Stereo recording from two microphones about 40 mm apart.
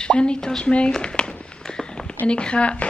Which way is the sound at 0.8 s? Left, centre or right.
Centre.